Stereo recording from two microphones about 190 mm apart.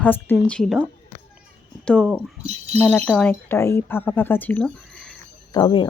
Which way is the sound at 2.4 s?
35° right (ahead or behind).